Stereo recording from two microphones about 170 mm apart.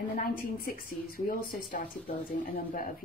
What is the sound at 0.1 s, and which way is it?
Speech, 55° left (ahead or behind).